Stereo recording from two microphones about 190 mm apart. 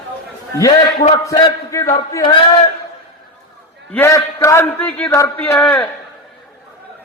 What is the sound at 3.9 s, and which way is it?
A man's voice, 15° left (ahead or behind).